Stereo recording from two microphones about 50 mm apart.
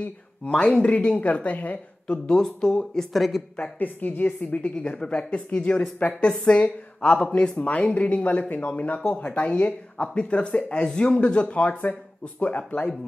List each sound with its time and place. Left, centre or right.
0.5 s speech: centre
0.7 s speech: left
2.2 s speech: centre
3.1 s speech: centre
3.8 s speech: left